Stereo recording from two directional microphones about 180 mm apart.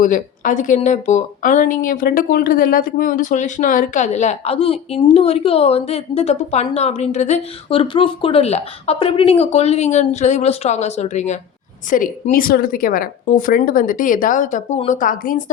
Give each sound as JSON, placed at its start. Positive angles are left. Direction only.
{"t": 0.0, "sound": "a woman's voice", "side_deg": 45}